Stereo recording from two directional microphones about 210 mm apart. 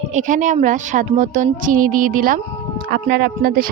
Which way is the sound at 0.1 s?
35° right (ahead or behind).